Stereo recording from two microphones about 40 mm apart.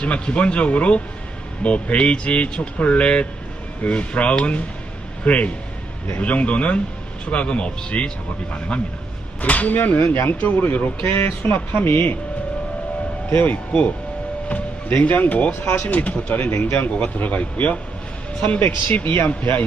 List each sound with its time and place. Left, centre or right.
0.0 s speech: left
11.2 s speech: left
11.5 s speech: left
13.3 s speech: left
14.5 s speech: left
16.5 s speech: left
17.2 s speech: left
18.9 s speech: left